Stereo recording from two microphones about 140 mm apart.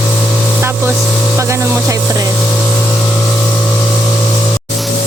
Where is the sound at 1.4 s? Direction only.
20° right (ahead or behind).